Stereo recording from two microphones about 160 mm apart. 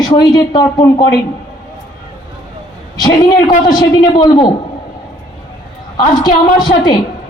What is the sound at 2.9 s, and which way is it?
A woman's voice, 25° left (ahead or behind).